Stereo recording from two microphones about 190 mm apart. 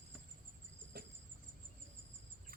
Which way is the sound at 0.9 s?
55° right (ahead or behind).